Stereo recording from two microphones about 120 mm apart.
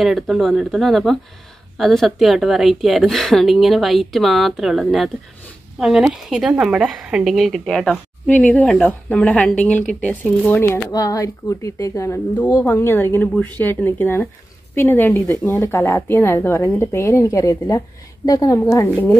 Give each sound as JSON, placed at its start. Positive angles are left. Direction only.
{"t": 0.0, "sound": "a woman's voice", "side_deg": 0}
{"t": 10.9, "sound": "a woman's voice", "side_deg": 30}